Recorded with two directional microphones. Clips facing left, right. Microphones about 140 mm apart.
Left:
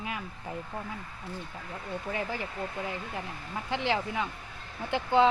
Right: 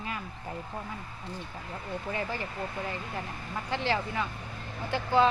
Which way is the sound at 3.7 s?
15° left (ahead or behind).